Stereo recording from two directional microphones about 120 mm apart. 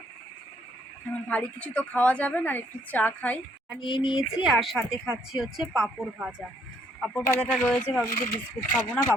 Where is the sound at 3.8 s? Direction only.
40° left (ahead or behind).